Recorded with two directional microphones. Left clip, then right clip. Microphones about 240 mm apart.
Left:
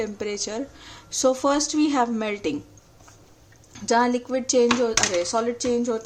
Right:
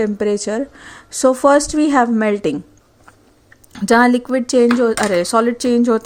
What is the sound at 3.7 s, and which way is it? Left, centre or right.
A woman's voice, right.